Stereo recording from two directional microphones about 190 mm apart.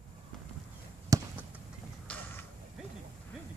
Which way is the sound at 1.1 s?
15° right (ahead or behind).